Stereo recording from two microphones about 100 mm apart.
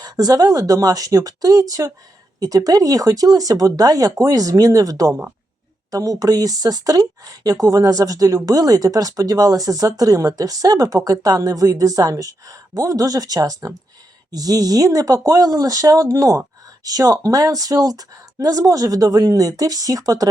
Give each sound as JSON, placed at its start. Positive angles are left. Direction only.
{"t": 0.0, "sound": "speech", "side_deg": -35}